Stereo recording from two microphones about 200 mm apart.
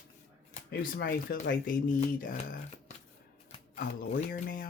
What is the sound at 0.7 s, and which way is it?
Speech, 50° left (ahead or behind).